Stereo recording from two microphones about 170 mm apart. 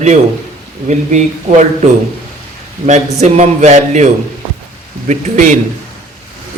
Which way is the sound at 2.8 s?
40° right (ahead or behind).